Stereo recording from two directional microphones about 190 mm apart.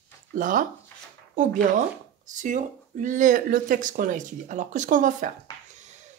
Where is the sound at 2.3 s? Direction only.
40° right (ahead or behind).